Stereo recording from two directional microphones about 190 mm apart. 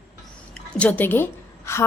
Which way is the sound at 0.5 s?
5° left (ahead or behind).